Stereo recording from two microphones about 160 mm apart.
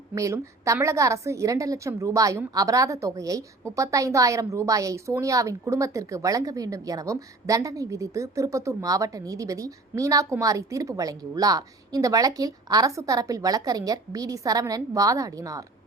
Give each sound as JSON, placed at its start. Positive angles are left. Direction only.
{"t": 0.1, "sound": "a woman's voice", "side_deg": -20}